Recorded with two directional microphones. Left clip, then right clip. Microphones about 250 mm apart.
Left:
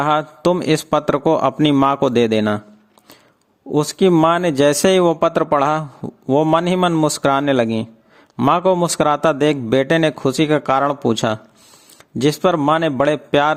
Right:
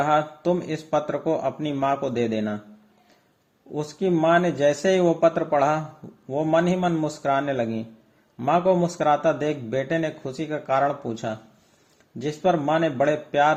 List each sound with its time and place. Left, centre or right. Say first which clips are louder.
0.0 s a man's voice: left 5 dB; left
3.7 s a man's voice: left 10 dB; left